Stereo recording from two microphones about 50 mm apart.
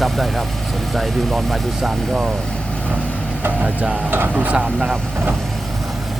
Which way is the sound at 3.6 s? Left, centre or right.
Right.